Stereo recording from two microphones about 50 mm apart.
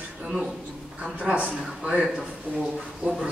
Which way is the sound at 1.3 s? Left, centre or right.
Right.